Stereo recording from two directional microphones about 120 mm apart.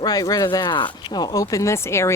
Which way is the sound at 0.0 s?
30° left (ahead or behind).